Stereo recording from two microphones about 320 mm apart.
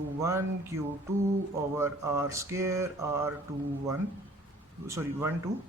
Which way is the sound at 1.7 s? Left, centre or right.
Centre.